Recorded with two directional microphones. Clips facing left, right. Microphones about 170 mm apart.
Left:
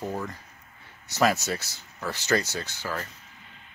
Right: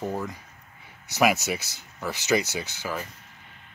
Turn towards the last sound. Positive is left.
turn(degrees=-15)  # may be behind; listen again after turning